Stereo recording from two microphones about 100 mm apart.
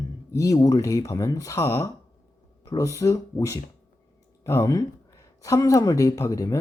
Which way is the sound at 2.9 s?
35° left (ahead or behind).